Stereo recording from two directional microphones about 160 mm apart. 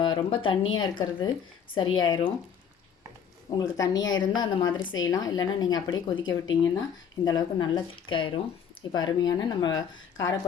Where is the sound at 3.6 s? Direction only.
25° left (ahead or behind).